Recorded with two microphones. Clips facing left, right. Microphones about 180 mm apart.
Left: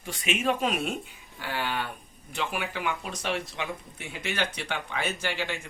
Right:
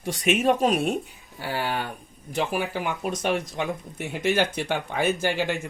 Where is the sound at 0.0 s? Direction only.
40° right (ahead or behind).